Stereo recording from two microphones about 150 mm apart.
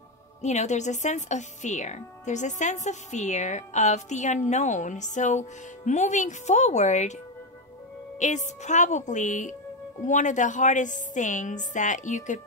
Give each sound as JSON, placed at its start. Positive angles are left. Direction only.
{"t": 0.4, "sound": "speech", "side_deg": 50}
{"t": 8.2, "sound": "a woman's voice", "side_deg": 50}